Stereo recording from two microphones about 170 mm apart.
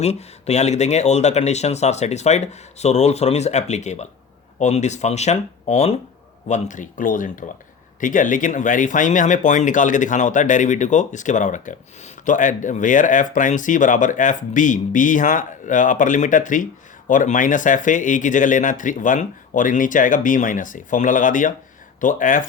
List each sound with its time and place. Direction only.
0.0 s speech: 40° left (ahead or behind)